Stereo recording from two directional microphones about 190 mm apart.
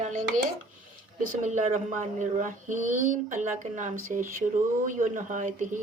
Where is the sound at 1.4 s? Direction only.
35° right (ahead or behind).